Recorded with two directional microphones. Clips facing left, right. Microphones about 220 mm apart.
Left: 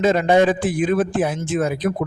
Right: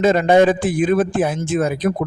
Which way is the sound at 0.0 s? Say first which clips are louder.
Right 2 dB; 50° right (ahead or behind).